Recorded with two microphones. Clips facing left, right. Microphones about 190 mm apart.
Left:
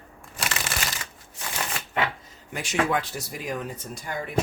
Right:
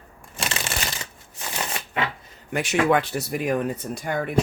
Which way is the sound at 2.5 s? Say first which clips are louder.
Right 5 dB; 65° right (ahead or behind).